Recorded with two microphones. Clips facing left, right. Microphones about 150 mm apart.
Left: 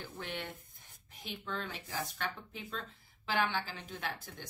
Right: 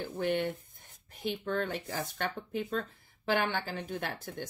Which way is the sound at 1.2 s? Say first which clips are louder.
Right 9 dB; 50° right (ahead or behind).